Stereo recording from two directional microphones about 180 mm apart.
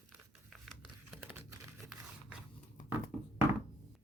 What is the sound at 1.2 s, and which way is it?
Crumpling, 10° right (ahead or behind).